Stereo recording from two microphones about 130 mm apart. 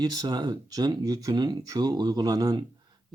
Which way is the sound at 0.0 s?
30° right (ahead or behind).